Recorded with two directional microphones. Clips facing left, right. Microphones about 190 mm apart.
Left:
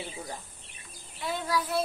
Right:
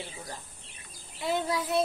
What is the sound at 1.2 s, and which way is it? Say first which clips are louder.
Child singing: right 2 dB; 25° right (ahead or behind).